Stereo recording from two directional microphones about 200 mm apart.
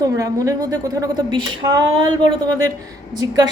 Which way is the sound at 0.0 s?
15° right (ahead or behind).